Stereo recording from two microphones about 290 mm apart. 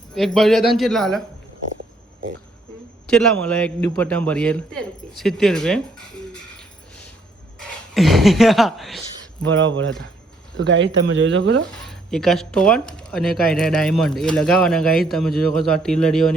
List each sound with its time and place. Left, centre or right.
0.1 s speech: centre
3.1 s speech: centre
7.9 s speech: centre
9.5 s speech: right
11.9 s speech: centre